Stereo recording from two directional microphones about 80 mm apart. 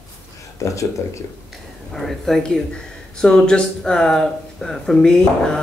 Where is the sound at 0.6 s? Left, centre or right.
Left.